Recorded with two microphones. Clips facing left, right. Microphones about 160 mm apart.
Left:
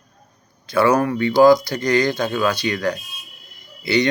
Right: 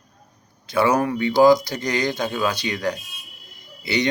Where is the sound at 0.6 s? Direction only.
15° right (ahead or behind).